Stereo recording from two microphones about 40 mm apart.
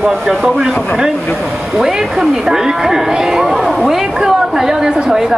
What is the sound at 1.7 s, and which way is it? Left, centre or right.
A woman's voice, centre.